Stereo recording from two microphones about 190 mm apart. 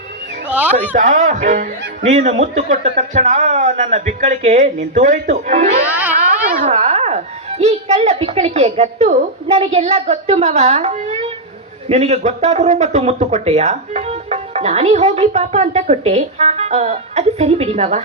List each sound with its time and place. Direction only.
0.8 s a child's voice: 40° right (ahead or behind)